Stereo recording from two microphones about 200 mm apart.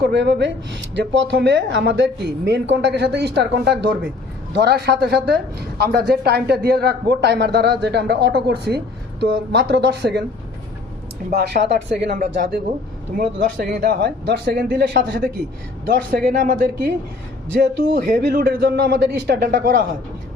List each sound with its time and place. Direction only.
0.0 s a woman's voice: 60° right (ahead or behind)
11.3 s a woman's voice: 55° right (ahead or behind)
18.0 s speech: 50° right (ahead or behind)